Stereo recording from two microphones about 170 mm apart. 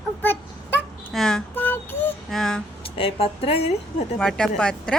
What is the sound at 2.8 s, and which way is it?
Speech, 35° left (ahead or behind).